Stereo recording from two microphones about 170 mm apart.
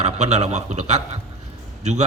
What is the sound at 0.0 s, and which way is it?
A man's voice, 40° right (ahead or behind).